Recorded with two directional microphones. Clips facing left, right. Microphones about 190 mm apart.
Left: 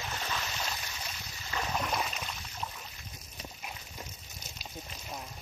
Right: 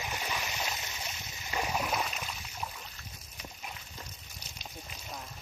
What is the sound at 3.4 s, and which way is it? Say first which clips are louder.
Clip-clop: left 1 dB; 30° left (ahead or behind).